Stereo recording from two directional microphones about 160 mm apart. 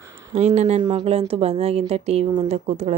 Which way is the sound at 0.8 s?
30° right (ahead or behind).